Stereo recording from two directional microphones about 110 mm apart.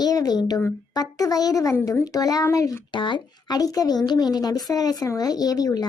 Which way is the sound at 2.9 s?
45° left (ahead or behind).